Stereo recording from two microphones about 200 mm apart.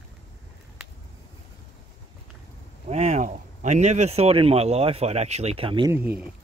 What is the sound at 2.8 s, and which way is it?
Speech, 30° right (ahead or behind).